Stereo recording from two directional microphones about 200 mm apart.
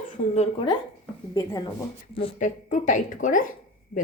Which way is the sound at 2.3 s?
40° left (ahead or behind).